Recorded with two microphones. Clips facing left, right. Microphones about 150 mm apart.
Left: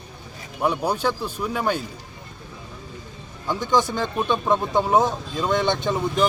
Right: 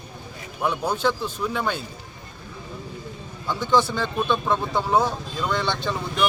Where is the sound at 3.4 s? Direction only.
15° left (ahead or behind).